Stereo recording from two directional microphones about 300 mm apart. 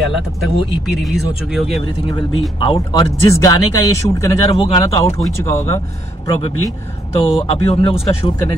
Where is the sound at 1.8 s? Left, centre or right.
Centre.